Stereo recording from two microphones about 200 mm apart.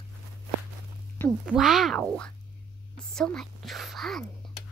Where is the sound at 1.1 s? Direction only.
10° left (ahead or behind).